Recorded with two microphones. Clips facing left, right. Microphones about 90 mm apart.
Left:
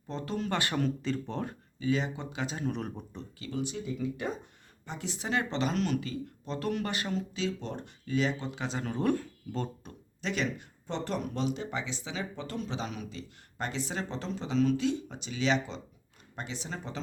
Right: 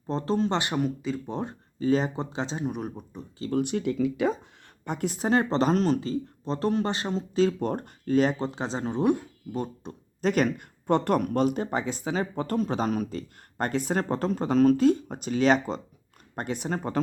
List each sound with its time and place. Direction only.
0.1 s speech: 35° right (ahead or behind); by 1.4 s 10° right (ahead or behind)
1.8 s speech: 40° right (ahead or behind)
2.6 s speech: 10° right (ahead or behind)
3.5 s speech: 60° right (ahead or behind); by 4.3 s 85° right
4.9 s speech: 50° right (ahead or behind); by 7.3 s 30° right (ahead or behind)
7.3 s speech: 50° right (ahead or behind)
8.9 s speech: 20° right (ahead or behind)
10.2 s speech: 45° right (ahead or behind)